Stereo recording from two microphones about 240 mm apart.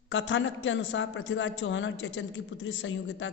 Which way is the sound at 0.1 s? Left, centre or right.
Left.